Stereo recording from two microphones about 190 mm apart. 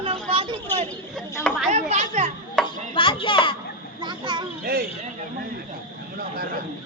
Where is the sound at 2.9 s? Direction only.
25° left (ahead or behind).